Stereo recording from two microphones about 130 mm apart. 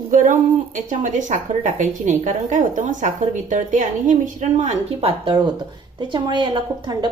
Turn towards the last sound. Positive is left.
turn(degrees=-35)  # may be behind; listen again after turning